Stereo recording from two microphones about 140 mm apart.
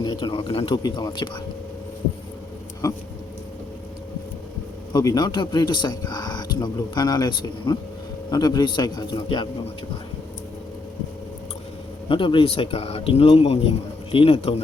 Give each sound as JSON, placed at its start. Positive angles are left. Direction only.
{"t": 0.0, "sound": "speech", "side_deg": 30}
{"t": 0.7, "sound": "a man's voice", "side_deg": 30}
{"t": 2.8, "sound": "a man's voice", "side_deg": 25}
{"t": 4.9, "sound": "a man's voice", "side_deg": 30}
{"t": 12.0, "sound": "speech", "side_deg": 40}